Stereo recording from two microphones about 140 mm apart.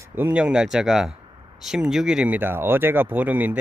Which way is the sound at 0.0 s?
15° right (ahead or behind).